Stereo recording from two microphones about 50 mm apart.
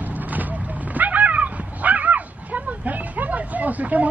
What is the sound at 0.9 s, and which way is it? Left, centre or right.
Dog, right.